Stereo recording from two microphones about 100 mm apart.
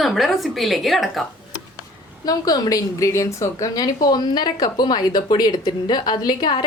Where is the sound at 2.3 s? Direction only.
40° left (ahead or behind).